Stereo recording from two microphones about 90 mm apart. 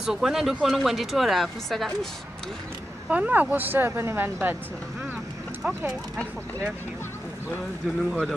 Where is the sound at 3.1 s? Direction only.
15° right (ahead or behind).